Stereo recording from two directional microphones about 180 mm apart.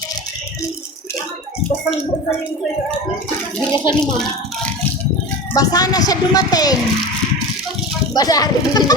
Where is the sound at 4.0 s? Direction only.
5° left (ahead or behind).